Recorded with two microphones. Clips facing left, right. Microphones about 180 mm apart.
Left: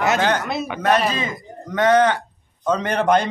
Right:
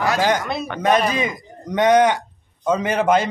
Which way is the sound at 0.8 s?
15° right (ahead or behind).